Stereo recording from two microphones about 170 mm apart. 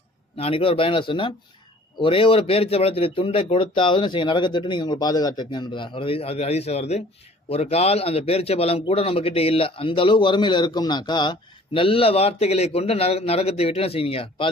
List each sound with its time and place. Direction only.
0.3 s a man's voice: 35° left (ahead or behind)